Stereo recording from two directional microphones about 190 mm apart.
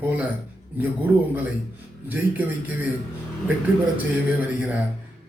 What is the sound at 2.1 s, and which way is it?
Speech, 10° right (ahead or behind).